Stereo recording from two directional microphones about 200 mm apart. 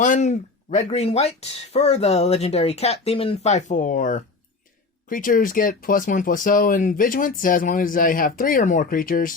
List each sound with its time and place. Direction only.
0.0 s speech: 35° left (ahead or behind)